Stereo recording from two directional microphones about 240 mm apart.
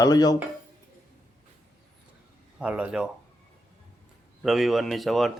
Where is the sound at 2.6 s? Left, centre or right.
Centre.